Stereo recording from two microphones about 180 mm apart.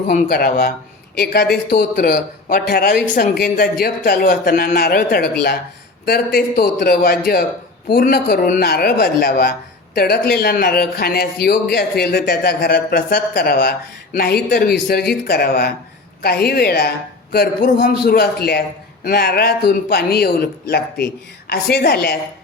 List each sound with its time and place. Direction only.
0.1 s speech: 60° left (ahead or behind)